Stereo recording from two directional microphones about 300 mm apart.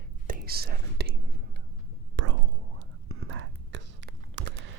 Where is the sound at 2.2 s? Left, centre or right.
Right.